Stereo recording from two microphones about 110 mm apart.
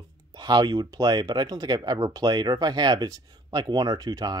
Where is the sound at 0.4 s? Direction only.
40° right (ahead or behind).